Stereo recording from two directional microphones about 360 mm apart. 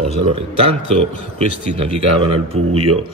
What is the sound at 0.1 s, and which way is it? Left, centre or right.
Speech, centre.